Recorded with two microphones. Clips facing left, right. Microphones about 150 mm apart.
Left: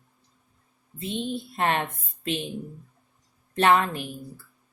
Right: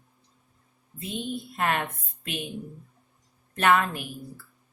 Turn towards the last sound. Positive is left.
turn(degrees=30)  # may be behind; listen again after turning